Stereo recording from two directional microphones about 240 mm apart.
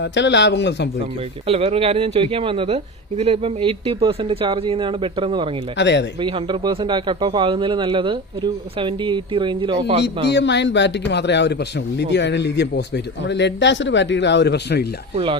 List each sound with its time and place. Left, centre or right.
0.0 s speech: left
1.5 s a man's voice: right
5.7 s speech: left
6.1 s a man's voice: right
10.2 s speech: left
15.1 s a man's voice: right